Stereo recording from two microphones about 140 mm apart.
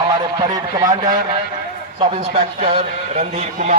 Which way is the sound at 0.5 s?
25° right (ahead or behind).